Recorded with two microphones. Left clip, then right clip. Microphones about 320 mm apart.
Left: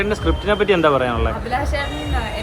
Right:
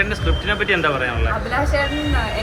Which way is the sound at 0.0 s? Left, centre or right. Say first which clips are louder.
Left 1 dB; centre.